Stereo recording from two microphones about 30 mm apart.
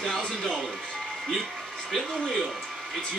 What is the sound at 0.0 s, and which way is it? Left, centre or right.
Music, centre.